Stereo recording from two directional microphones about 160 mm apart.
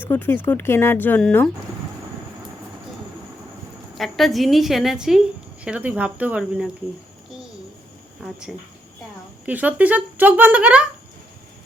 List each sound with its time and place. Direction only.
0.0 s speech: 15° left (ahead or behind)
3.9 s a woman's voice: centre (ahead or behind)
8.2 s a woman's voice: centre (ahead or behind)